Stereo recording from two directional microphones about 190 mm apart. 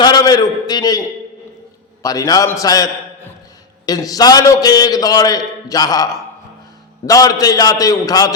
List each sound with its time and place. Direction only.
0.0 s a man's voice: 20° left (ahead or behind)